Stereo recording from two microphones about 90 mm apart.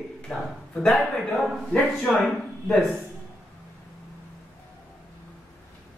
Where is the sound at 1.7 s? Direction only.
5° left (ahead or behind).